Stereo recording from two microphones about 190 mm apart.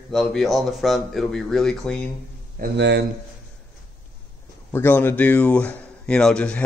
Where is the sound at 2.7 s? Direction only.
65° right (ahead or behind).